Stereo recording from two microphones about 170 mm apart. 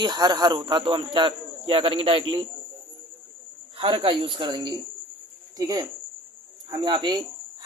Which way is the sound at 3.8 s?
30° right (ahead or behind).